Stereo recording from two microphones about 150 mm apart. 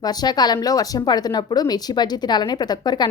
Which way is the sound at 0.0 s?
25° left (ahead or behind).